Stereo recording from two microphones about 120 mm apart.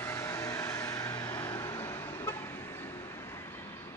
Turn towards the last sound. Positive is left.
turn(degrees=20)  # may be behind; listen again after turning